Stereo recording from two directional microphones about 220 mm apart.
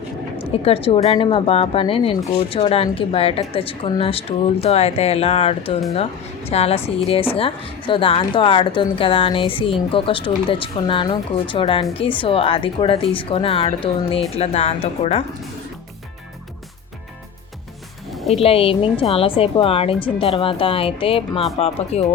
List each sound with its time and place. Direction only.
0.3 s a woman's voice: 25° left (ahead or behind)
18.3 s a woman's voice: 25° left (ahead or behind)